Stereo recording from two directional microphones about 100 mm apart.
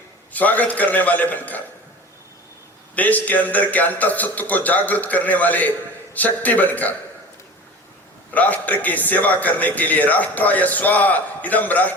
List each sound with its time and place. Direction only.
0.3 s a man's voice: 15° left (ahead or behind)
2.9 s a man's voice: 15° left (ahead or behind)
8.3 s a man's voice: 15° left (ahead or behind)